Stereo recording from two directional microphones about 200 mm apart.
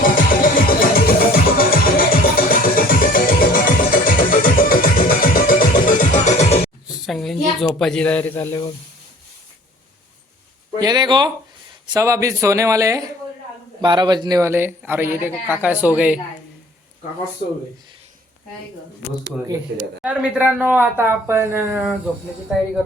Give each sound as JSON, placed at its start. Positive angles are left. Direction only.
{"t": 0.0, "sound": "music", "side_deg": 45}
{"t": 6.8, "sound": "a sound", "side_deg": 0}
{"t": 10.8, "sound": "speech", "side_deg": -20}
{"t": 20.0, "sound": "speech", "side_deg": -5}